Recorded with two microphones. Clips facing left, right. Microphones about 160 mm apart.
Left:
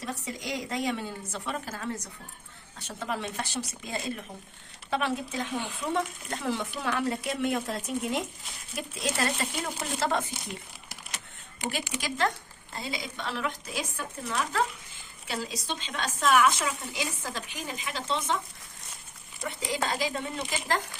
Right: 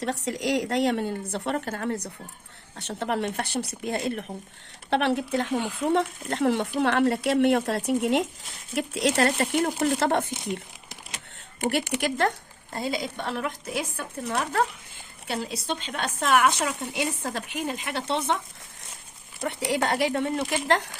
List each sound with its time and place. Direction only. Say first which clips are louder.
0.0 s a woman's voice: right 8 dB; 75° right (ahead or behind)
11.6 s speech: right 8 dB; 60° right (ahead or behind)
19.4 s speech: right 6 dB; 70° right (ahead or behind)